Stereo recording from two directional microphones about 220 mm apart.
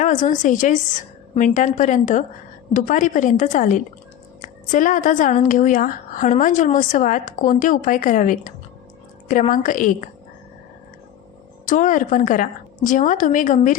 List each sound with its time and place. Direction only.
0.0 s a woman's voice: 35° left (ahead or behind)
11.6 s a woman's voice: 35° left (ahead or behind)